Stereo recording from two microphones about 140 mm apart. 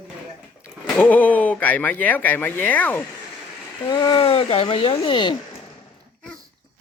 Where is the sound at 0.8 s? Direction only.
10° left (ahead or behind).